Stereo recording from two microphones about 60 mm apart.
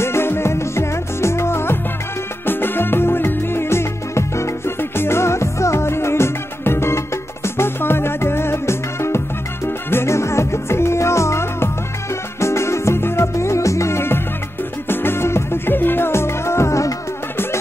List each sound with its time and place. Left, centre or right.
0.0 s music: left